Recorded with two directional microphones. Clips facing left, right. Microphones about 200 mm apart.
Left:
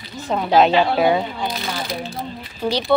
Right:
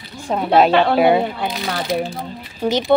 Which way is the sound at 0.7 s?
60° right (ahead or behind).